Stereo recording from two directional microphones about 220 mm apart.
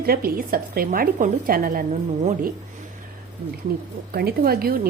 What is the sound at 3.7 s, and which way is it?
A woman's voice, 45° right (ahead or behind).